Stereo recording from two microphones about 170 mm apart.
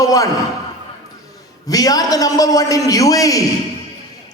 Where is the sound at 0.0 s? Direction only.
20° left (ahead or behind).